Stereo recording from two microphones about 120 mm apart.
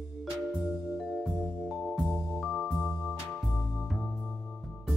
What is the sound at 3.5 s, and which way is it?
Music, 5° left (ahead or behind).